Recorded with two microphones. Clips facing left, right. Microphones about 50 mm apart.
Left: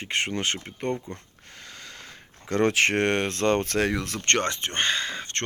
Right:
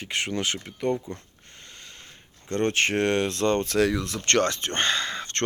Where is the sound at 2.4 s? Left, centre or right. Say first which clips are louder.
Left 2 dB; left.